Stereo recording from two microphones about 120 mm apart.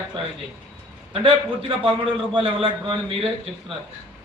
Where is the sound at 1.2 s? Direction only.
45° right (ahead or behind).